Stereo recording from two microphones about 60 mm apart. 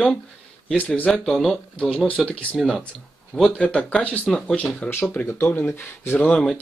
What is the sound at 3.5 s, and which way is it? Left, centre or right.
Speech, centre.